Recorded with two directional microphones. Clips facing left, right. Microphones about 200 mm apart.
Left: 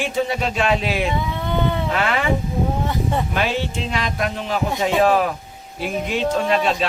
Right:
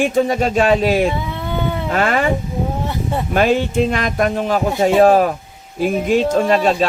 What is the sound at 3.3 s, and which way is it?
Speech, 45° right (ahead or behind).